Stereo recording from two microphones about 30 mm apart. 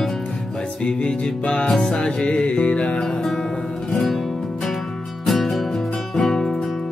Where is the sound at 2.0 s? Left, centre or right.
Left.